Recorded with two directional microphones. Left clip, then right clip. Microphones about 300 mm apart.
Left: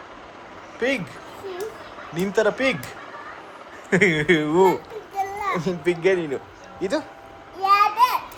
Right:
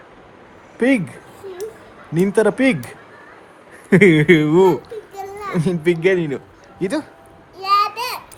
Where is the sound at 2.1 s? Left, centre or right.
Right.